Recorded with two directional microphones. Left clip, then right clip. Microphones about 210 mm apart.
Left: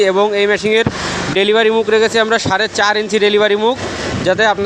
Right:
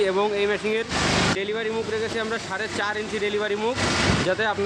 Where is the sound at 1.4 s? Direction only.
50° left (ahead or behind).